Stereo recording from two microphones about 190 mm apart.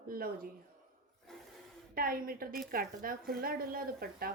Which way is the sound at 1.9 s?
50° right (ahead or behind).